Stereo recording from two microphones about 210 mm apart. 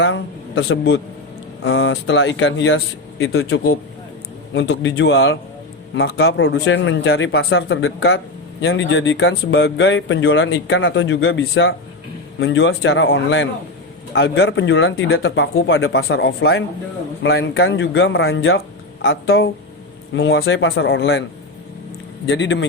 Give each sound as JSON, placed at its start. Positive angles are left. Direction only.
{"t": 0.0, "sound": "speech", "side_deg": 60}
{"t": 4.5, "sound": "speech", "side_deg": 55}
{"t": 20.1, "sound": "speech", "side_deg": 60}
{"t": 22.3, "sound": "speech", "side_deg": 60}